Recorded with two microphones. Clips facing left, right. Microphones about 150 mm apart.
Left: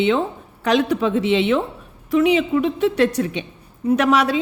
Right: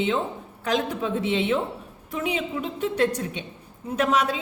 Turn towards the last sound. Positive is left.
turn(degrees=80)